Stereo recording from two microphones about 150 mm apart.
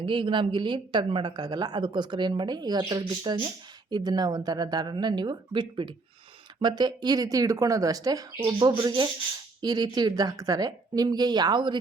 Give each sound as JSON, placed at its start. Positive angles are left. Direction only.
{"t": 0.0, "sound": "speech", "side_deg": -35}